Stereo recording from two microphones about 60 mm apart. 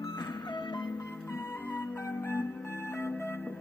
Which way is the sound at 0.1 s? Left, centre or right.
Left.